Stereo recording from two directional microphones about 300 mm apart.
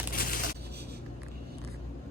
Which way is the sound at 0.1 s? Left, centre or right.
Left.